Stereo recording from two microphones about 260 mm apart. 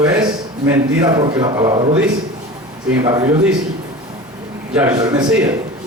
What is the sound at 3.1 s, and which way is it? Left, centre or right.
Speech, centre.